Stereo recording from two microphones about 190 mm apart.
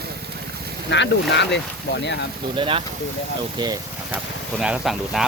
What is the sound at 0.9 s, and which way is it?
Speech, 70° left (ahead or behind).